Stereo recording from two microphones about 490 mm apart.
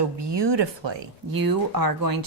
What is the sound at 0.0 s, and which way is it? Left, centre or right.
Speech, right.